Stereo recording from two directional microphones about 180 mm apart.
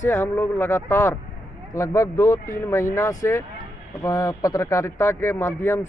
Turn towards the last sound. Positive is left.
turn(degrees=15)  # may be behind; listen again after turning